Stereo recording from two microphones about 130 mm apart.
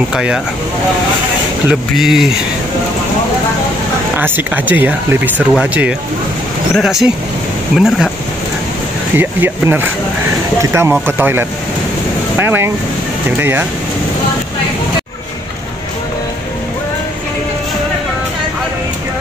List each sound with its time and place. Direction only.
0.1 s speech: 5° right (ahead or behind)
1.7 s speech: 5° right (ahead or behind)
4.2 s speech: 15° right (ahead or behind)
9.1 s speech: 15° right (ahead or behind)